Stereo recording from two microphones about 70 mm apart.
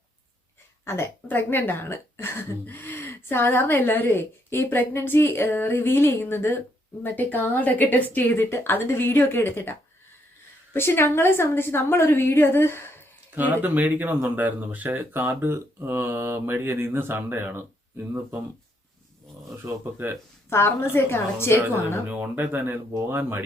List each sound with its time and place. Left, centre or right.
0.9 s a woman's voice: left
10.8 s speech: left
13.3 s speech: right
19.5 s speech: right
20.5 s speech: left
22.1 s speech: right